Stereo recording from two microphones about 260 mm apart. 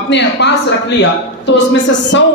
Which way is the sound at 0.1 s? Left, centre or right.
Left.